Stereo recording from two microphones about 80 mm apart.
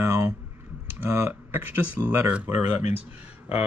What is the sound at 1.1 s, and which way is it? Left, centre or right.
Speech, right.